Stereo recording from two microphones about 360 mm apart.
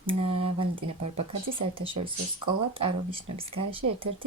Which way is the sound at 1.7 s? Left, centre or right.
Centre.